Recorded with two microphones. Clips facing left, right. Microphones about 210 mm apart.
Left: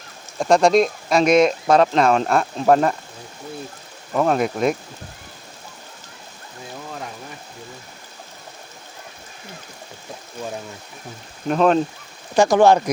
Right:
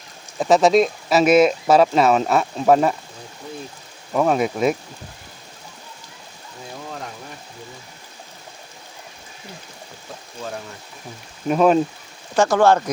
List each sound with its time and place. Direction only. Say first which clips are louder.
0.3 s speech: even; 5° right (ahead or behind)
4.1 s speech: even; centre (ahead or behind)
11.4 s speech: right 1 dB; 5° right (ahead or behind)
12.4 s speech: left 2 dB; 15° left (ahead or behind)